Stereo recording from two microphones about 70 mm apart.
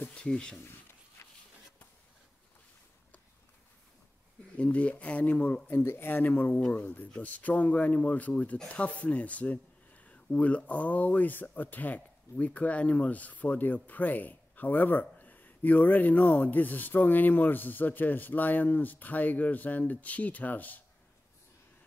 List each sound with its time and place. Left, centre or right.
0.2 s speech: centre
4.6 s speech: centre
5.7 s speech: left